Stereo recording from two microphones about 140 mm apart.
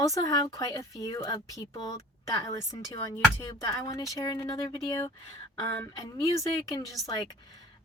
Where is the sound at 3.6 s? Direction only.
25° left (ahead or behind).